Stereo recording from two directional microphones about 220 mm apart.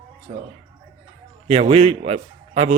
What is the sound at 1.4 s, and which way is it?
A man's voice, 30° right (ahead or behind).